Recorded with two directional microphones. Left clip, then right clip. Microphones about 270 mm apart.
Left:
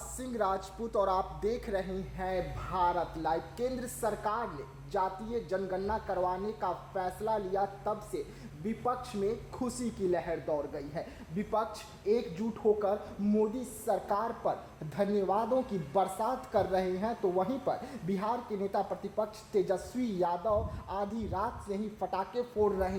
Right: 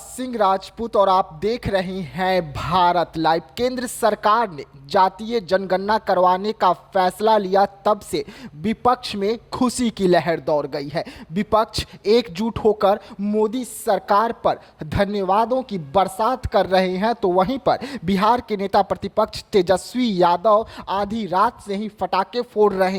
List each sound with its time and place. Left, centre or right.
0.2 s a man's voice: right